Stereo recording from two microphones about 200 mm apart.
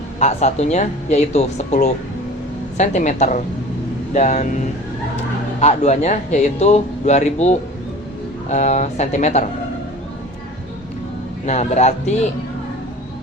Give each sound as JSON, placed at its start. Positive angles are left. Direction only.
{"t": 0.2, "sound": "speech", "side_deg": 35}
{"t": 11.4, "sound": "speech", "side_deg": 35}